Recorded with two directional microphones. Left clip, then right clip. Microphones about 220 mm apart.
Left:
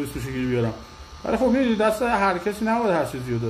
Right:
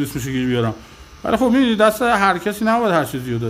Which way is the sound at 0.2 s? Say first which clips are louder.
Right 4 dB; 45° right (ahead or behind).